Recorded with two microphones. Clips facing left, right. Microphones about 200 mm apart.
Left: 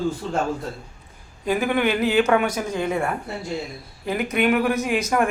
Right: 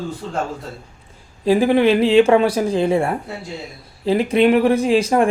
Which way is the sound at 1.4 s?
30° right (ahead or behind).